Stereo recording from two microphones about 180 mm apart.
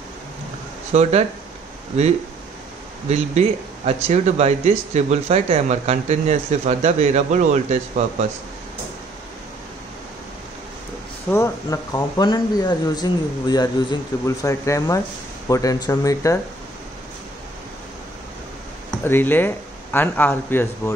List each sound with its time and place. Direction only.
0.9 s speech: 40° right (ahead or behind)
3.1 s speech: 40° right (ahead or behind)
11.2 s speech: 15° left (ahead or behind)
19.0 s speech: 10° left (ahead or behind)